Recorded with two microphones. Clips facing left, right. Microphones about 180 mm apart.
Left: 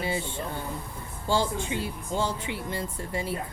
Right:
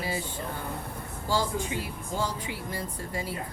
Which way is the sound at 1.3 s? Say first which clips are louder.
Left 2 dB; 25° left (ahead or behind).